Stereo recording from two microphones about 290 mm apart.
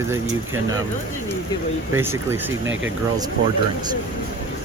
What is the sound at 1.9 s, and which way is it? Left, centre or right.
Speech, centre.